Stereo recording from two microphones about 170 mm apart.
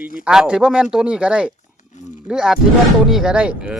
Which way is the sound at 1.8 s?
45° left (ahead or behind).